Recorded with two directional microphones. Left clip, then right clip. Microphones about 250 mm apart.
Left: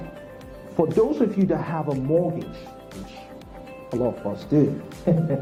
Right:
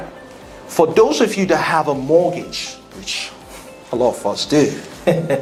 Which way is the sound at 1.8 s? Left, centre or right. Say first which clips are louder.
Right 8 dB; right.